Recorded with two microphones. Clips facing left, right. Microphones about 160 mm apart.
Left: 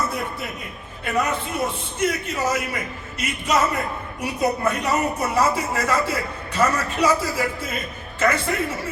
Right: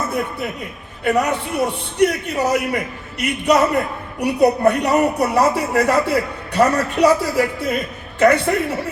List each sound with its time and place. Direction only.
1.0 s a man's voice: 70° right (ahead or behind)